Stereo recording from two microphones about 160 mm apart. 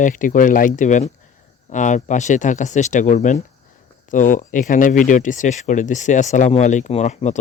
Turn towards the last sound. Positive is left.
turn(degrees=45)  # may be behind; listen again after turning